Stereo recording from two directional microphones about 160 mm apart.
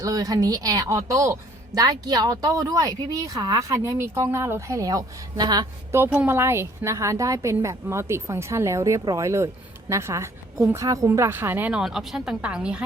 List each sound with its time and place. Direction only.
0.0 s a woman's voice: 25° right (ahead or behind); by 12.8 s 5° right (ahead or behind)